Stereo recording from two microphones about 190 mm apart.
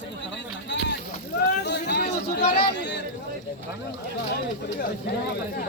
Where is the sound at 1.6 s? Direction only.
60° left (ahead or behind).